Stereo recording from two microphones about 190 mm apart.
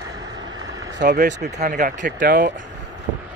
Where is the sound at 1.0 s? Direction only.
45° right (ahead or behind).